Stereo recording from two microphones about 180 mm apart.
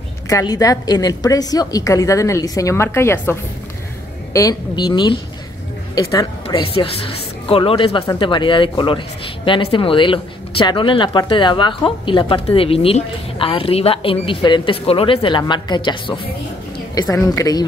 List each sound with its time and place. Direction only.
0.3 s speech: 20° left (ahead or behind)
6.4 s a woman's voice: 30° left (ahead or behind)